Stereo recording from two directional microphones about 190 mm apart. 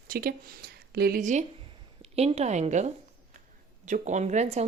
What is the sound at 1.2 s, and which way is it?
A woman's voice, 40° right (ahead or behind).